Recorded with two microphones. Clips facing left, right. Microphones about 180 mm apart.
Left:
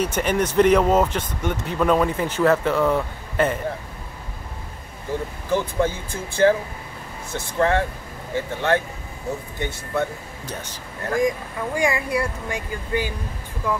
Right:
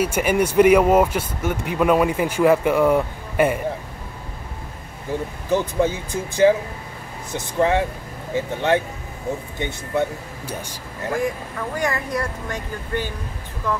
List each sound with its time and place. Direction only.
0.0 s speech: 10° right (ahead or behind)
5.5 s speech: 15° right (ahead or behind)
11.2 s speech: 10° left (ahead or behind)